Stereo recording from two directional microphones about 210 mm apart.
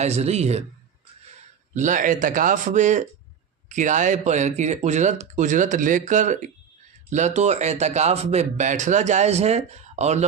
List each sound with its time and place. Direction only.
0.0 s speech: 30° right (ahead or behind)
1.7 s speech: 35° right (ahead or behind)